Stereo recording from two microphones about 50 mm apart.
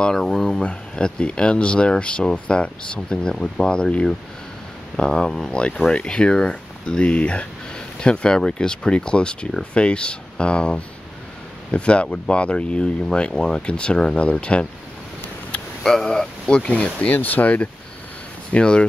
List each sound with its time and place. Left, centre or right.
0.0 s speech: centre
0.6 s speech: centre
15.8 s speech: centre
17.1 s speech: left
18.5 s speech: centre